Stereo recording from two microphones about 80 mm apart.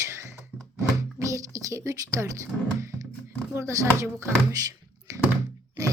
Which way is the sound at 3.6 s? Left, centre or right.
Right.